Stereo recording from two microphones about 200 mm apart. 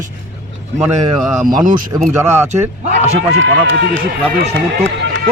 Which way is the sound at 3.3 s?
70° right (ahead or behind).